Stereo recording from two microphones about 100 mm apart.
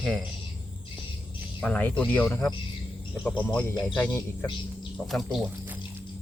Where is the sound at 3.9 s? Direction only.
20° left (ahead or behind).